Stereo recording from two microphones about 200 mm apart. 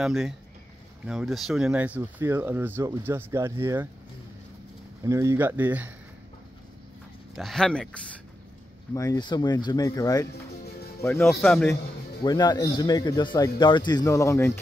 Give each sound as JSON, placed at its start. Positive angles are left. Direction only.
{"t": 0.0, "sound": "speech", "side_deg": 0}
{"t": 5.0, "sound": "speech", "side_deg": -15}
{"t": 7.3, "sound": "speech", "side_deg": 0}
{"t": 8.9, "sound": "speech", "side_deg": 15}
{"t": 12.2, "sound": "speech", "side_deg": 20}